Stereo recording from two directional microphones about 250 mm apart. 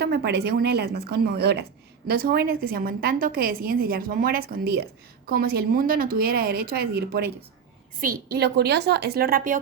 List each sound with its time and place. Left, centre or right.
0.0 s a woman's voice: right